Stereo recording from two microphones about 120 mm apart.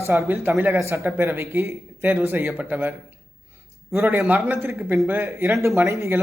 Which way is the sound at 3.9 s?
20° right (ahead or behind).